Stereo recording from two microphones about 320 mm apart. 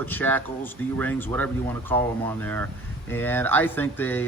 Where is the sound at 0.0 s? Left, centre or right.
Centre.